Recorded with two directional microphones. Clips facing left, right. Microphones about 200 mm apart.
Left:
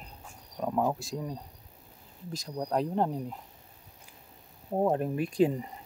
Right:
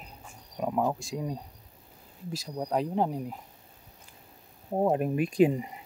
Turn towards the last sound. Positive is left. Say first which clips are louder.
# right 3 dB
turn(degrees=-10)  # may be behind; listen again after turning